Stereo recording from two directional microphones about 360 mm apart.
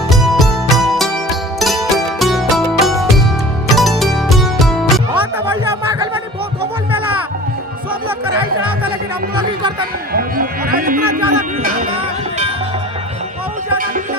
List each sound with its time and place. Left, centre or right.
0.1 s music: centre
10.1 s music: right
11.0 s a sound: right
11.6 s music: centre